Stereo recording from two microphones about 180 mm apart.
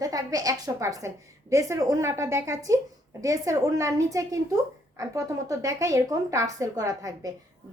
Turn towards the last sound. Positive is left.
turn(degrees=-20)  # may be behind; listen again after turning